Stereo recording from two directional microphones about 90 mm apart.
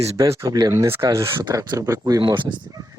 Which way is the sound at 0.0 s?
40° right (ahead or behind).